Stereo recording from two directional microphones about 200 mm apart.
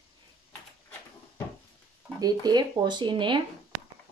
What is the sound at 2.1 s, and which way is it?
Speech, 20° right (ahead or behind).